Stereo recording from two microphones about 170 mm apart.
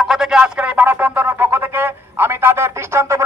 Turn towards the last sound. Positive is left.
turn(degrees=-15)  # may be behind; listen again after turning